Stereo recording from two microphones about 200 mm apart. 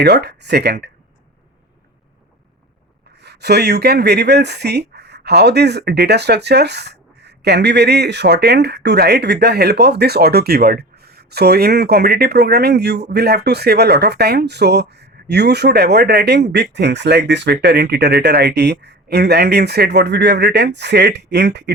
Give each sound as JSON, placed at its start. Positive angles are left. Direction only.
{"t": 0.0, "sound": "speech", "side_deg": -55}
{"t": 3.2, "sound": "speech", "side_deg": -55}